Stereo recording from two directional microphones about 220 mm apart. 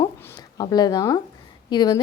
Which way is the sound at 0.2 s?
15° left (ahead or behind).